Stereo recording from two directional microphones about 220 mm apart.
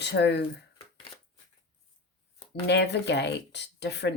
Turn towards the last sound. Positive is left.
turn(degrees=50)  # may be behind; listen again after turning